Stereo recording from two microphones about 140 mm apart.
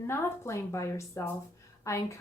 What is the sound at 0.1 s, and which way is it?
Speech, 20° left (ahead or behind).